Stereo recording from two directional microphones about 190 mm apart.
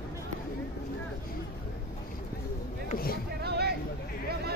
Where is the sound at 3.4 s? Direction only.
55° right (ahead or behind).